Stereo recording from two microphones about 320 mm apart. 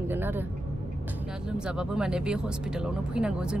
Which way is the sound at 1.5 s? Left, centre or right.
Centre.